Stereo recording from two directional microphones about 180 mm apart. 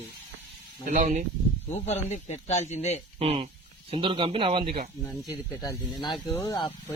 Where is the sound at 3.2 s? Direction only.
35° right (ahead or behind).